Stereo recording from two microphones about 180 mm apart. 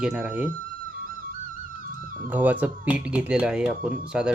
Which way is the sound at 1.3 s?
50° right (ahead or behind).